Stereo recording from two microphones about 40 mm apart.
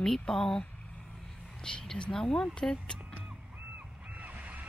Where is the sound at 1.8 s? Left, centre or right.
Centre.